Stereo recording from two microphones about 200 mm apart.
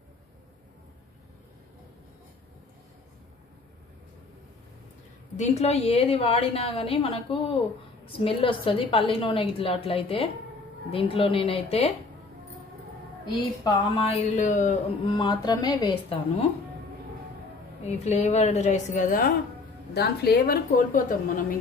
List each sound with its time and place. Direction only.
5.4 s a woman's voice: 35° left (ahead or behind)
14.0 s a woman's voice: 35° left (ahead or behind)
15.0 s a woman's voice: 20° left (ahead or behind)
17.8 s a woman's voice: 35° left (ahead or behind)